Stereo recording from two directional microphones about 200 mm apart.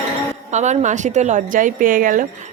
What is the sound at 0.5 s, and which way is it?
Speech, 35° right (ahead or behind).